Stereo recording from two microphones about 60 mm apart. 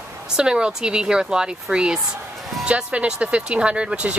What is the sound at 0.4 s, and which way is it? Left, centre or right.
Speech, centre.